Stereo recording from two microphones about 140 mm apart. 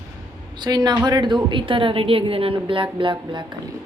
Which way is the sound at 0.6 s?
30° right (ahead or behind).